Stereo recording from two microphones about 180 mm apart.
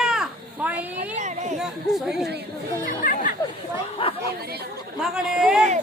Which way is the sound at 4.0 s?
30° left (ahead or behind).